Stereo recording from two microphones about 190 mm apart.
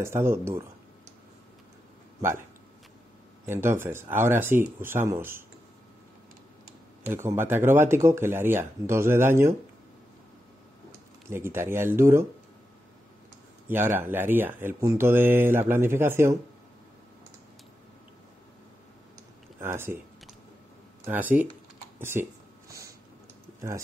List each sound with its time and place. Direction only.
0.0 s speech: 15° right (ahead or behind)
3.4 s speech: 15° right (ahead or behind)
7.1 s speech: 10° right (ahead or behind)
11.2 s speech: 15° right (ahead or behind)
13.7 s speech: 10° right (ahead or behind)
19.6 s speech: 10° right (ahead or behind)
21.0 s speech: 10° right (ahead or behind)
21.5 s typing: 10° right (ahead or behind)
22.7 s a sound: 15° right (ahead or behind)